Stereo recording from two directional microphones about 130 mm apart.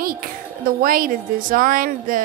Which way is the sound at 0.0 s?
90° right.